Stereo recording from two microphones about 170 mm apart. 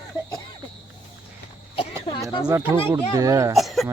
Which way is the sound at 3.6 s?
Centre (ahead or behind).